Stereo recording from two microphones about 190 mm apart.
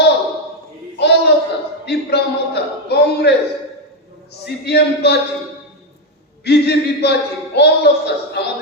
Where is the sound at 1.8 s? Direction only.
60° left (ahead or behind).